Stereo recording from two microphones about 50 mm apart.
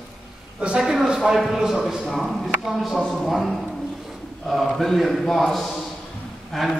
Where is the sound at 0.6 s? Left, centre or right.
Centre.